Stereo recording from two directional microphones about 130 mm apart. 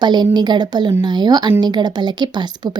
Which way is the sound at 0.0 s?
35° right (ahead or behind).